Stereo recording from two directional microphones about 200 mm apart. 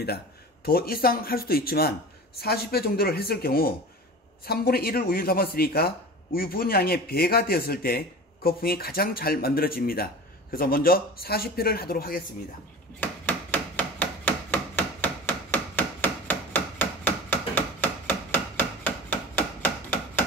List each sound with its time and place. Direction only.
0.7 s speech: 50° left (ahead or behind)
13.0 s a sound: 10° left (ahead or behind)
18.3 s hammer: 10° left (ahead or behind)